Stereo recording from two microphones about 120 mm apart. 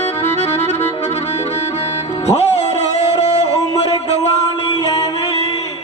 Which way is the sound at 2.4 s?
60° left (ahead or behind).